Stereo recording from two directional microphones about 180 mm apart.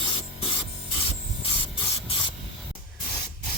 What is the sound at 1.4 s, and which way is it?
Printer, 30° left (ahead or behind).